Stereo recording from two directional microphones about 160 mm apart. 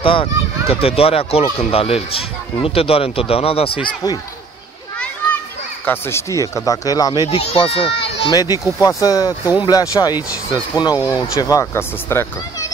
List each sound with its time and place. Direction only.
0.0 s speech: 35° left (ahead or behind)
4.9 s children playing: 5° left (ahead or behind)
5.9 s speech: 15° left (ahead or behind)
7.2 s speech: 40° left (ahead or behind)
8.3 s speech: 25° left (ahead or behind)